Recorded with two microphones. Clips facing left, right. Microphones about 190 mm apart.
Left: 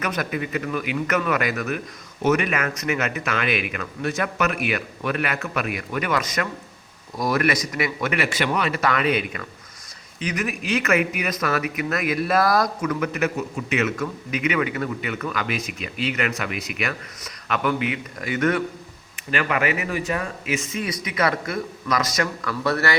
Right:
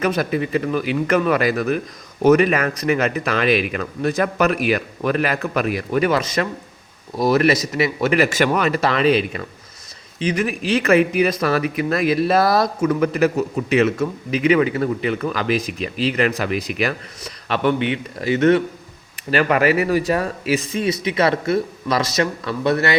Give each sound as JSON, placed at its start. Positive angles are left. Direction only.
{"t": 0.0, "sound": "speech", "side_deg": -30}
{"t": 8.8, "sound": "speech", "side_deg": -30}
{"t": 19.3, "sound": "speech", "side_deg": -40}